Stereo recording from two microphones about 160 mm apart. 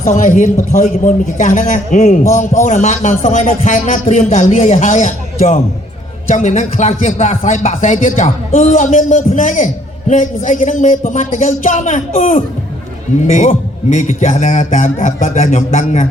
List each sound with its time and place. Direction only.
0.0 s speech: 55° left (ahead or behind)